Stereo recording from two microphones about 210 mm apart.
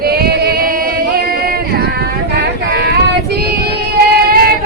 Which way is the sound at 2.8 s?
50° right (ahead or behind).